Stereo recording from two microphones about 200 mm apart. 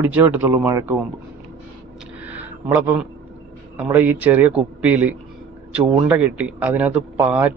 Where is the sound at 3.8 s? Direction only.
10° right (ahead or behind).